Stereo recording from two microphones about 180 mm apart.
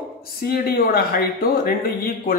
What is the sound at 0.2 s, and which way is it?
Speech, 60° left (ahead or behind).